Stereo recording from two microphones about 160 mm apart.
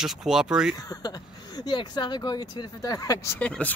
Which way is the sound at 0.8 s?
25° left (ahead or behind).